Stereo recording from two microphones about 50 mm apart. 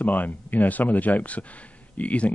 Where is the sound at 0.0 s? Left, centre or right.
Left.